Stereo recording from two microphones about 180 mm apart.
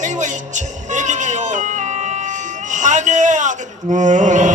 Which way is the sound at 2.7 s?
45° right (ahead or behind).